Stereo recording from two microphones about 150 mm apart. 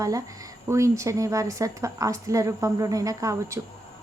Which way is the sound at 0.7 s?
20° right (ahead or behind).